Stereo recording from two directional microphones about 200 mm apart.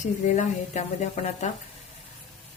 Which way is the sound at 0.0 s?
35° left (ahead or behind).